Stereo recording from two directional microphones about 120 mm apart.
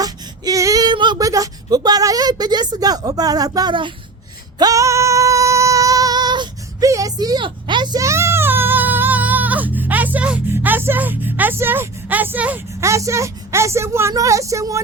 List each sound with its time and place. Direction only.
0.0 s speech: 30° right (ahead or behind)
4.5 s female singing: 30° right (ahead or behind)
7.9 s child singing: 25° right (ahead or behind)
12.8 s speech: 25° right (ahead or behind)